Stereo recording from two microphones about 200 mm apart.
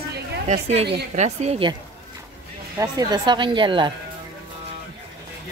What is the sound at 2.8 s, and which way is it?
Speech, 20° right (ahead or behind).